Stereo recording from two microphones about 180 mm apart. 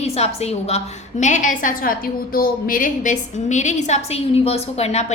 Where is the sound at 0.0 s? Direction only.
35° left (ahead or behind).